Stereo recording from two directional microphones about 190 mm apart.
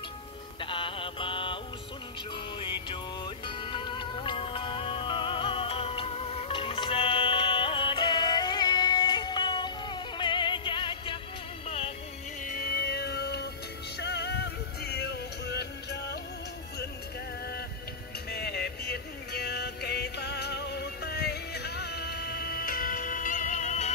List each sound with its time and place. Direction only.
0.6 s mantra: 25° left (ahead or behind)
2.3 s music: 25° left (ahead or behind)
12.4 s music: 50° left (ahead or behind)
18.3 s music: 55° left (ahead or behind); by 23.9 s 40° left (ahead or behind)